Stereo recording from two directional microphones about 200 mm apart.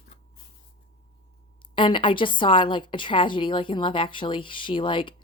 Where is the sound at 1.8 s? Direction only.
25° left (ahead or behind).